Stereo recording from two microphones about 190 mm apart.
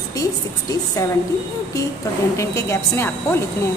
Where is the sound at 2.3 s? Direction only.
15° left (ahead or behind).